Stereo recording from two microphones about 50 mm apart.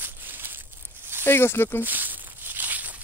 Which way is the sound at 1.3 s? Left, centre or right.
Left.